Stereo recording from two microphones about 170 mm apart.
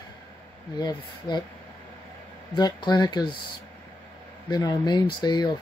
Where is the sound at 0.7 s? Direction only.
25° left (ahead or behind).